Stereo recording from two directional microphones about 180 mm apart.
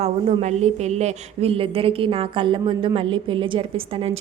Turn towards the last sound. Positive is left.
turn(degrees=-35)  # may be behind; listen again after turning